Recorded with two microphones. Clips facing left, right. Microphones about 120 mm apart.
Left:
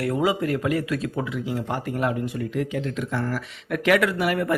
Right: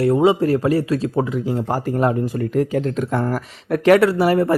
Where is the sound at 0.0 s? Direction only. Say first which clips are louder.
Right 8 dB; 30° right (ahead or behind).